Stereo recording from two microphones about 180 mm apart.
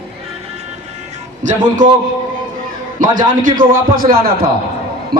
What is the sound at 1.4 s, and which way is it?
Speech, 45° right (ahead or behind).